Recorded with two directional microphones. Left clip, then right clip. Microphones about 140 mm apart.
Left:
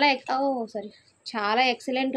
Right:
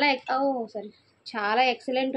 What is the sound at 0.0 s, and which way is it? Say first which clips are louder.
A woman's voice: left 1 dB; 25° left (ahead or behind).